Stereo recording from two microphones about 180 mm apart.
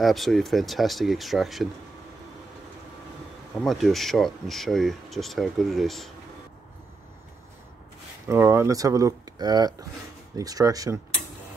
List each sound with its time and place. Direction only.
0.0 s speech: centre (ahead or behind)
3.6 s speech: centre (ahead or behind)
8.3 s speech: 15° right (ahead or behind)